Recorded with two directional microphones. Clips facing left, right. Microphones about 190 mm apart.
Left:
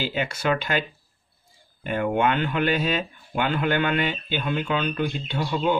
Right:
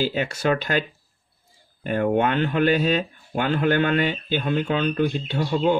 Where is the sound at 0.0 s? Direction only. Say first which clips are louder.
Right 3 dB; 40° right (ahead or behind).